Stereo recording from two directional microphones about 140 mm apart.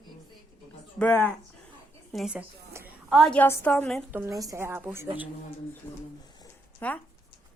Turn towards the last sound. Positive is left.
turn(degrees=10)  # may be behind; listen again after turning